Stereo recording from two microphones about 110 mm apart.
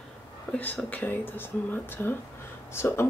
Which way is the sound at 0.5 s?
10° left (ahead or behind).